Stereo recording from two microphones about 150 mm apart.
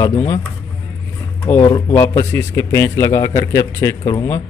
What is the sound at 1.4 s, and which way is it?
Speech, 15° left (ahead or behind).